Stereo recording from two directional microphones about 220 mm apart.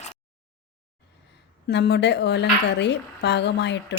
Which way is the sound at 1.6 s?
50° left (ahead or behind).